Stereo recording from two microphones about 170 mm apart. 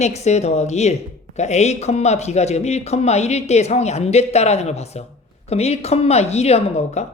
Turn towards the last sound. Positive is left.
turn(degrees=40)  # may be behind; listen again after turning